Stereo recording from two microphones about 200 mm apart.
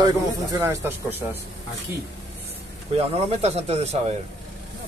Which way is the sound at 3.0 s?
30° right (ahead or behind).